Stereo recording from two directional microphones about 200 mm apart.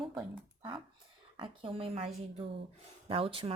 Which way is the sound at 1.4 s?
25° right (ahead or behind).